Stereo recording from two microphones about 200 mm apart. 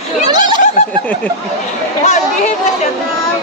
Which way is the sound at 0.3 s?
20° right (ahead or behind).